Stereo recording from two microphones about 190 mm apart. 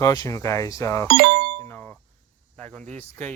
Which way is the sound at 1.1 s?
60° right (ahead or behind).